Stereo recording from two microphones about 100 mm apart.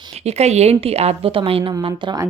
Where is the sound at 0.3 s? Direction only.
90° right; by 1.7 s 65° right (ahead or behind).